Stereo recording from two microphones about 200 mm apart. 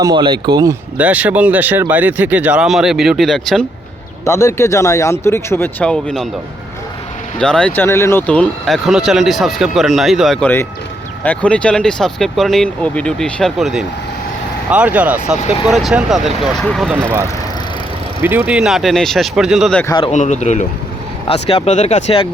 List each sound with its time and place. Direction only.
0.0 s speech: 25° right (ahead or behind)
0.9 s speech: 5° right (ahead or behind)
4.3 s speech: 15° left (ahead or behind)
7.3 s speech: 5° left (ahead or behind)
17.0 s speech: 15° right (ahead or behind)
19.8 s speech: 20° left (ahead or behind)
20.1 s speech: 35° left (ahead or behind)